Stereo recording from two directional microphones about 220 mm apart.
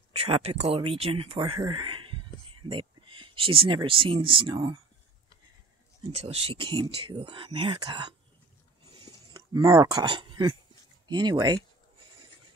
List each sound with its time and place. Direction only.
0.1 s speech: 25° right (ahead or behind)
6.1 s speech: 25° right (ahead or behind)
9.0 s a sound: 15° right (ahead or behind)
11.1 s speech: 20° right (ahead or behind)